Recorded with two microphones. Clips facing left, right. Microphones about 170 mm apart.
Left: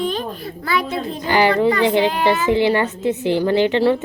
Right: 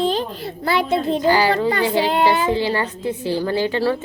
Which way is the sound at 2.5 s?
20° left (ahead or behind).